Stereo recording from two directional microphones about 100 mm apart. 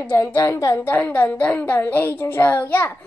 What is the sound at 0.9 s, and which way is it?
A child's voice, 15° left (ahead or behind).